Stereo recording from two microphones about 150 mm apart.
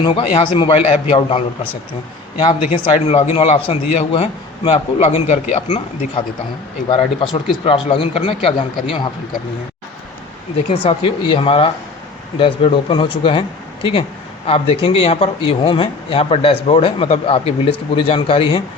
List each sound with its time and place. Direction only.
0.0 s speech: 35° left (ahead or behind)
2.7 s a man's voice: 40° left (ahead or behind)
6.8 s speech: 35° left (ahead or behind)
10.7 s speech: 40° left (ahead or behind)
14.4 s speech: 40° left (ahead or behind)